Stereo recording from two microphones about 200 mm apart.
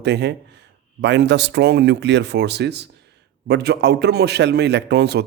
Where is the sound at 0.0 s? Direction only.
60° right (ahead or behind).